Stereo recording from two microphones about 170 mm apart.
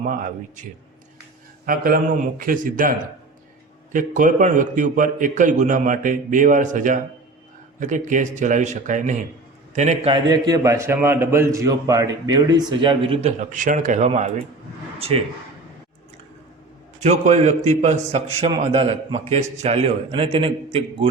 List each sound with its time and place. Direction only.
0.0 s a man's voice: 50° right (ahead or behind)
3.9 s a man's voice: 50° right (ahead or behind); by 13.3 s 30° right (ahead or behind)
13.4 s a man's voice: 50° right (ahead or behind)
17.0 s a man's voice: 40° right (ahead or behind)